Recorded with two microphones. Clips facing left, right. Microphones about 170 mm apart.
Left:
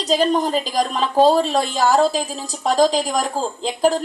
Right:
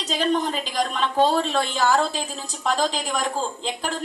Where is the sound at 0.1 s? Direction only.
40° left (ahead or behind).